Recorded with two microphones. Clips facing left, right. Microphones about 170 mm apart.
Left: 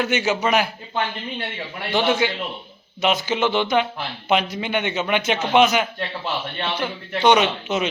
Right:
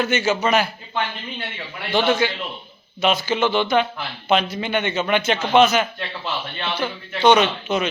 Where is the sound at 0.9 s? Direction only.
35° left (ahead or behind).